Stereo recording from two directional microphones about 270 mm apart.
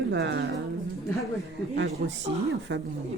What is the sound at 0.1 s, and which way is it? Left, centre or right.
Speech, right.